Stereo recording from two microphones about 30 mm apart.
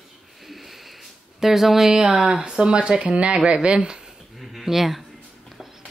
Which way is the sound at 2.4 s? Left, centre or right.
Right.